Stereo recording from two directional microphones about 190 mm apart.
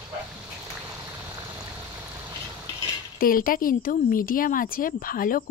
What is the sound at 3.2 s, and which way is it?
Speech, 50° left (ahead or behind).